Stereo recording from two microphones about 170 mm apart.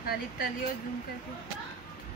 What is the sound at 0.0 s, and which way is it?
Speech, 65° left (ahead or behind).